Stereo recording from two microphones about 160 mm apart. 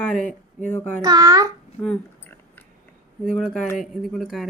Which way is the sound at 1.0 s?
25° right (ahead or behind).